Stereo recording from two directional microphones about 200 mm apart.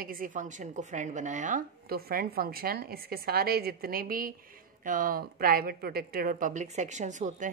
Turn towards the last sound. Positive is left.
turn(degrees=-40)  # may be behind; listen again after turning